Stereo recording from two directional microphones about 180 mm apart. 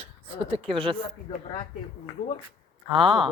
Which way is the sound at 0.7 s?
30° right (ahead or behind).